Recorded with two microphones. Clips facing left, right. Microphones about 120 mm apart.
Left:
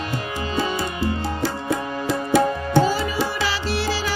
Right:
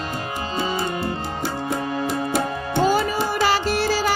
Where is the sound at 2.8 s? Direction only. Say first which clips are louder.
Right 2 dB; 50° right (ahead or behind).